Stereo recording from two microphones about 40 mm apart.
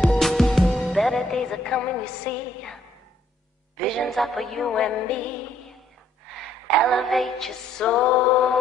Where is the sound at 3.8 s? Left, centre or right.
Centre.